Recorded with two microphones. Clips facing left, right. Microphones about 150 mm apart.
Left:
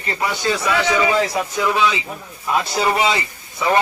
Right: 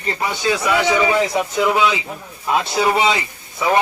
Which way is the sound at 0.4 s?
15° right (ahead or behind).